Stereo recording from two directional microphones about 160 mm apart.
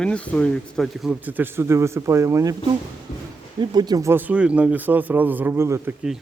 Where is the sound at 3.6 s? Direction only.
25° right (ahead or behind).